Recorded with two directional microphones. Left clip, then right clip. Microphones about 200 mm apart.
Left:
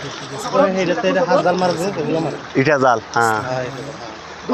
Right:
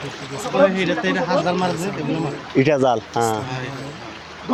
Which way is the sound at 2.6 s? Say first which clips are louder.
Left 2 dB; 25° right (ahead or behind).